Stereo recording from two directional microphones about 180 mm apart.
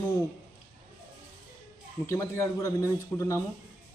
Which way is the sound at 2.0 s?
15° left (ahead or behind).